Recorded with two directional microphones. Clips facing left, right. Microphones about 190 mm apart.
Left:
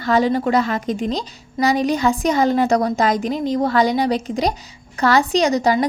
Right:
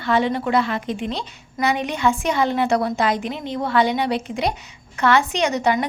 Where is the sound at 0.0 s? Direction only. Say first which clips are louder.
Left 3 dB; 40° left (ahead or behind).